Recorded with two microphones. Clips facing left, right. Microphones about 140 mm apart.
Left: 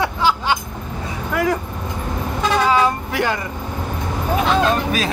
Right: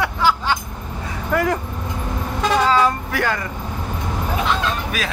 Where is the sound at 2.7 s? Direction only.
20° left (ahead or behind).